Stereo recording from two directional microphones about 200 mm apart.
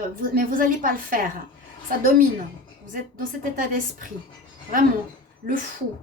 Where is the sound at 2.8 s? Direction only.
45° right (ahead or behind).